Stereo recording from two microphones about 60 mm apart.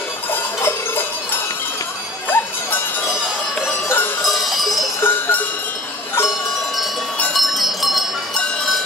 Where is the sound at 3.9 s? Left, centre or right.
Left.